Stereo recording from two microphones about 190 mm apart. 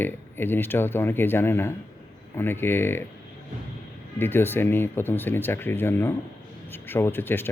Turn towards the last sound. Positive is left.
turn(degrees=10)  # may be behind; listen again after turning